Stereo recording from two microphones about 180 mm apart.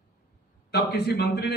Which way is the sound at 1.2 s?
65° left (ahead or behind).